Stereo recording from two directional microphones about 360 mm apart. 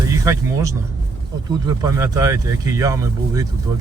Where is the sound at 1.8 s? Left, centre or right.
Centre.